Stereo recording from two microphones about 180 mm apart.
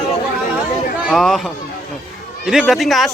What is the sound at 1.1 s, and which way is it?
Speech, centre (ahead or behind).